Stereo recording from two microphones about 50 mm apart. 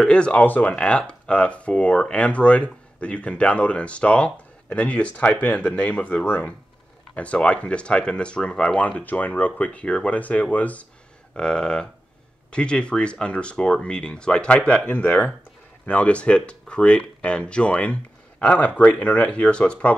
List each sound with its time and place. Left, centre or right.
0.0 s speech: left
11.3 s speech: centre
14.9 s speech: left